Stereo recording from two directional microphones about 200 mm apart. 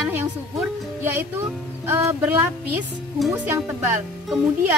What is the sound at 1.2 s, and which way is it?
Speech, 10° right (ahead or behind).